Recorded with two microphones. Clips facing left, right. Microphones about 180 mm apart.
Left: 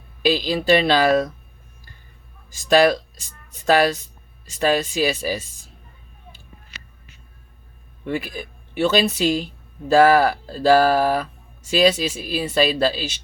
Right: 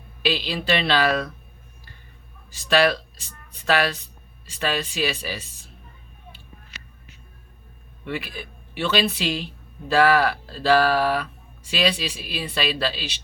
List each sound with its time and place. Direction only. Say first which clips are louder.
0.2 s speech: left 5 dB; 45° left (ahead or behind)
2.5 s speech: left 4 dB; 45° left (ahead or behind)
8.0 s speech: left 5 dB; 45° left (ahead or behind)